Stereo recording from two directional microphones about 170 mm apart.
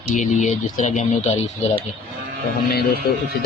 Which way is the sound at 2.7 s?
65° left (ahead or behind).